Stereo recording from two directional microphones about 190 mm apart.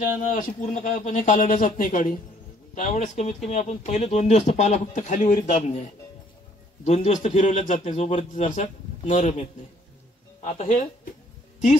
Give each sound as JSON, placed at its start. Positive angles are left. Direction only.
{"t": 0.0, "sound": "a man's voice", "side_deg": 45}
{"t": 6.8, "sound": "a man's voice", "side_deg": 35}